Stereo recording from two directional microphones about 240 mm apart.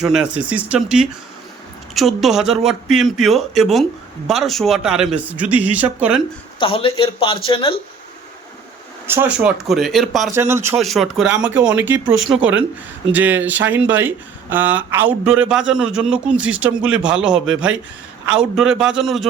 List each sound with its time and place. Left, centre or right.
0.0 s a man's voice: centre
6.6 s a man's voice: left
9.0 s a man's voice: centre
10.3 s speech: centre
10.8 s a man's voice: centre